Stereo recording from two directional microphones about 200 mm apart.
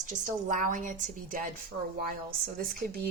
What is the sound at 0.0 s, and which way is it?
A woman's voice, 40° right (ahead or behind).